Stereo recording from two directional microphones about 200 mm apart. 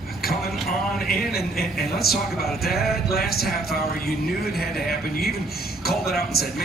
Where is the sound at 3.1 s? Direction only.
50° left (ahead or behind).